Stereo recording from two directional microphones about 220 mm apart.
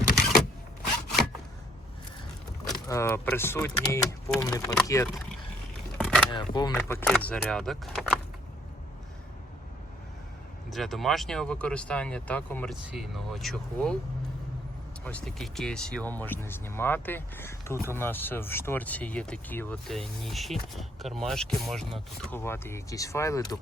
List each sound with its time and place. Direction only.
2.8 s speech: 15° left (ahead or behind)
6.0 s a sound: 5° left (ahead or behind)
6.3 s speech: 20° left (ahead or behind)
6.7 s speech: 5° left (ahead or behind)
10.7 s speech: centre (ahead or behind)
12.8 s speech: 5° right (ahead or behind)
15.0 s speech: 5° left (ahead or behind)